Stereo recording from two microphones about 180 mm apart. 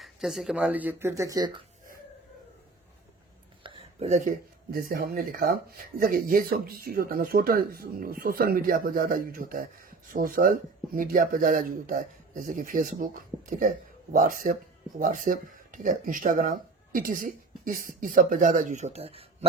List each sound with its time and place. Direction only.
0.0 s speech: centre (ahead or behind); by 1.6 s 20° right (ahead or behind)
3.6 s a sound: 30° right (ahead or behind)
4.7 s speech: 55° right (ahead or behind); by 19.5 s 35° right (ahead or behind)